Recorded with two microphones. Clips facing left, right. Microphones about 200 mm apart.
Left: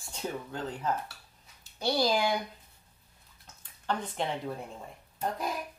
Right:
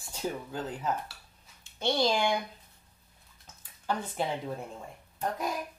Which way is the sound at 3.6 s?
10° right (ahead or behind).